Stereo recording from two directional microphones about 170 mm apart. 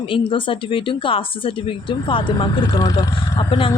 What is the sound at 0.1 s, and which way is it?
A woman's voice, 30° left (ahead or behind).